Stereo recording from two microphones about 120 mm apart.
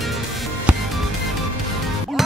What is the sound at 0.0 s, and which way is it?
Music, centre (ahead or behind).